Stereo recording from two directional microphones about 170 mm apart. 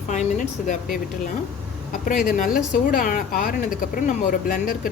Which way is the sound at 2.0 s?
55° left (ahead or behind).